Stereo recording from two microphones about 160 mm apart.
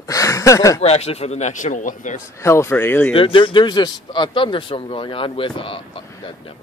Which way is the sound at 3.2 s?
35° left (ahead or behind).